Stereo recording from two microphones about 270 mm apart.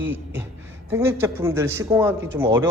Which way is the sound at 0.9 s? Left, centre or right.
Centre.